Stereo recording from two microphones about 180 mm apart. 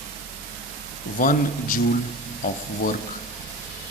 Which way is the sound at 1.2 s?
50° left (ahead or behind).